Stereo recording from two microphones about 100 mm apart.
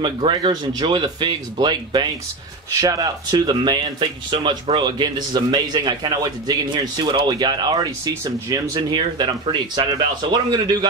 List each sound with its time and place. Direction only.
0.0 s a man's voice: 55° right (ahead or behind)
2.8 s a man's voice: 35° right (ahead or behind)
4.0 s a man's voice: 55° right (ahead or behind); by 8.7 s 35° right (ahead or behind)
8.7 s a man's voice: 50° right (ahead or behind)